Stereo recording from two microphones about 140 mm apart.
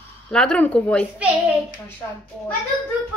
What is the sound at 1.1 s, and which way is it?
Speech, 10° right (ahead or behind).